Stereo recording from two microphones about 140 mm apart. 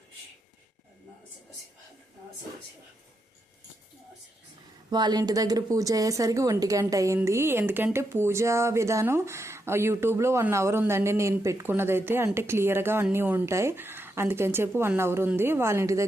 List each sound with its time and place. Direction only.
4.9 s speech: 30° right (ahead or behind)